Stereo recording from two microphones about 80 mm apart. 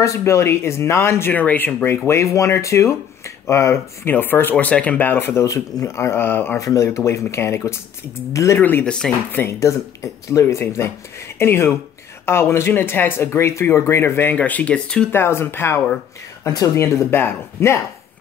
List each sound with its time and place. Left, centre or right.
0.0 s speech: left
1.3 s speech: left
5.4 s speech: left
6.6 s speech: left
8.8 s speech: centre
9.4 s speech: left
14.3 s speech: centre
15.0 s speech: left
16.4 s speech: left
16.7 s speech: left